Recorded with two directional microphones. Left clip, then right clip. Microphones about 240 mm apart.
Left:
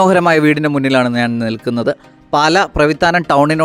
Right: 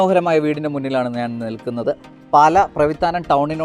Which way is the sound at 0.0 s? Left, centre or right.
Left.